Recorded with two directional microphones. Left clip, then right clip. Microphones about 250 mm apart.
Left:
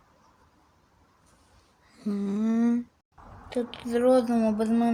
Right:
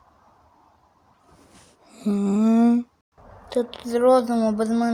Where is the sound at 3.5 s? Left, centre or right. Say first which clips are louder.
Right 5 dB; centre.